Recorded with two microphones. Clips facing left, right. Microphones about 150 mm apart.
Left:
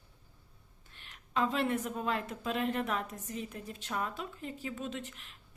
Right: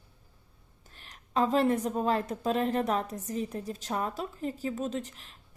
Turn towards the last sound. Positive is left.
turn(degrees=-35)  # may be behind; listen again after turning